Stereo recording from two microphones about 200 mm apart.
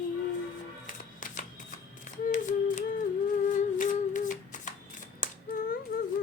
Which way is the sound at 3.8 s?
40° left (ahead or behind).